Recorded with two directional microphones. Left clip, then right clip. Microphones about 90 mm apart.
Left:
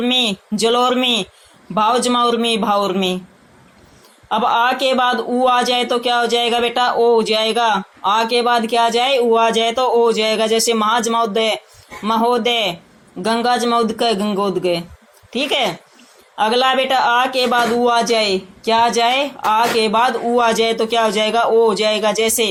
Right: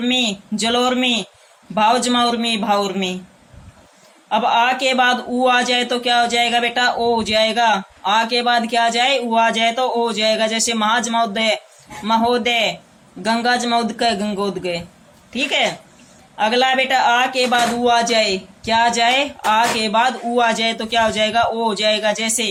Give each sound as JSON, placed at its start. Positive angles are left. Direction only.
{"t": 0.1, "sound": "a man's voice", "side_deg": 60}
{"t": 4.3, "sound": "a man's voice", "side_deg": 55}